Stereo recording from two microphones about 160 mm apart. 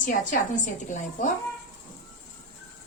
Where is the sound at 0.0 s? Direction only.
55° left (ahead or behind).